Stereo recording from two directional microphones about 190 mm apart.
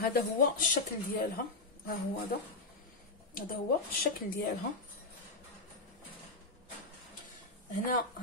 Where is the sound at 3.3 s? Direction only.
50° left (ahead or behind).